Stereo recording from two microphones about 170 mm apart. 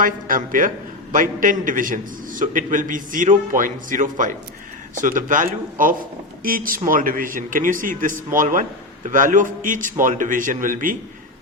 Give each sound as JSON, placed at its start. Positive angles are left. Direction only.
{"t": 0.0, "sound": "a man's voice", "side_deg": -50}